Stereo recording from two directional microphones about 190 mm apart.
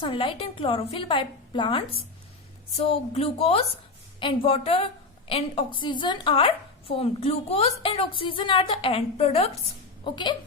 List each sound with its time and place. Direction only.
0.0 s a woman's voice: 25° left (ahead or behind)